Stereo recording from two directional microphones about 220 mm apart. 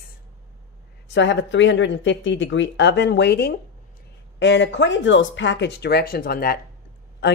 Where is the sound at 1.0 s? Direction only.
55° left (ahead or behind).